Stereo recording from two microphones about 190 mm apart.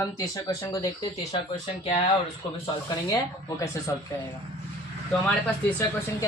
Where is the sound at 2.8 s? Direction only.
20° left (ahead or behind).